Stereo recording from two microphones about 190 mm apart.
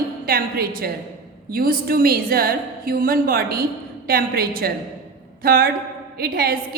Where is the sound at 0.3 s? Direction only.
50° right (ahead or behind).